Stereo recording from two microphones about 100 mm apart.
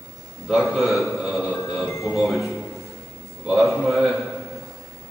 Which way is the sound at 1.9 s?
30° left (ahead or behind).